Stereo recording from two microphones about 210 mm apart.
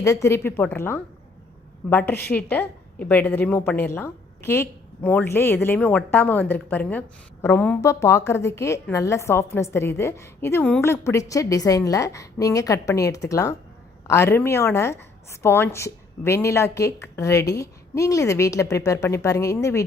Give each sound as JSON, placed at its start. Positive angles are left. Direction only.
{"t": 0.0, "sound": "a woman's voice", "side_deg": 15}